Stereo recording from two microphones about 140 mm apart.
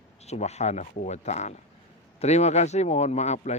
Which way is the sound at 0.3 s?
50° left (ahead or behind).